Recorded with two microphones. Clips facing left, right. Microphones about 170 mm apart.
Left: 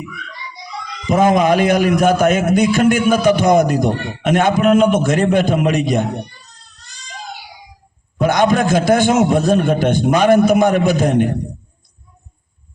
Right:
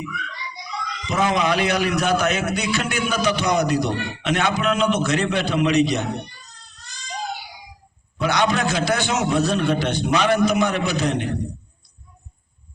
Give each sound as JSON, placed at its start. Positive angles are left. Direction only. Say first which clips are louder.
{"t": 1.0, "sound": "a man's voice", "louder": "left 8 dB", "side_deg": 50}
{"t": 8.2, "sound": "a man's voice", "louder": "left 6 dB", "side_deg": 50}